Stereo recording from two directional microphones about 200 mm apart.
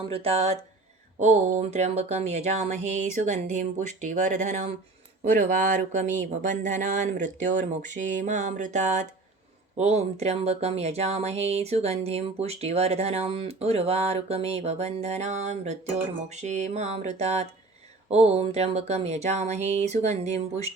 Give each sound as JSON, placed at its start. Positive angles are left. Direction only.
{"t": 0.1, "sound": "speech", "side_deg": -30}